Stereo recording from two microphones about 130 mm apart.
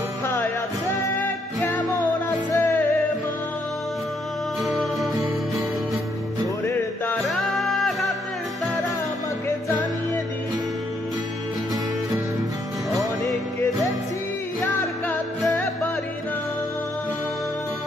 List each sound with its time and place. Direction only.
1.2 s music: 15° left (ahead or behind)
4.6 s music: centre (ahead or behind)
7.2 s music: centre (ahead or behind)